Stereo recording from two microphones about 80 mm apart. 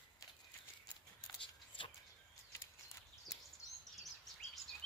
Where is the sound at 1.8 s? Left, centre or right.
Left.